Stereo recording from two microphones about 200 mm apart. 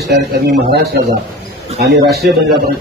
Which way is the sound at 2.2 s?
55° right (ahead or behind).